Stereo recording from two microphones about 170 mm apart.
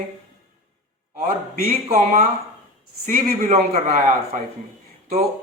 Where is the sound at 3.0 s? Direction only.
50° right (ahead or behind).